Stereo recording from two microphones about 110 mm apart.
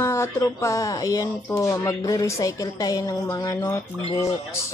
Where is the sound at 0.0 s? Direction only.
25° left (ahead or behind).